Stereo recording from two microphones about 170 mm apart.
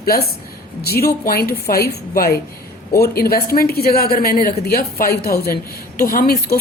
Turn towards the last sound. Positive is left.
turn(degrees=60)  # may be behind; listen again after turning